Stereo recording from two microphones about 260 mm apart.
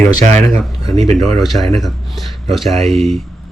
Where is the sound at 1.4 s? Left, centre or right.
Centre.